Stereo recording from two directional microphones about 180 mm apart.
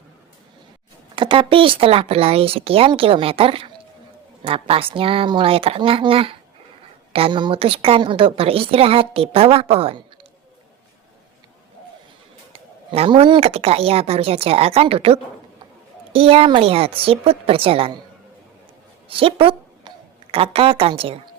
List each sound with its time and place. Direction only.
1.1 s a woman's voice: 30° right (ahead or behind)
12.9 s a woman's voice: 35° right (ahead or behind)
19.0 s a sound: 30° right (ahead or behind)
20.3 s a woman's voice: 30° right (ahead or behind)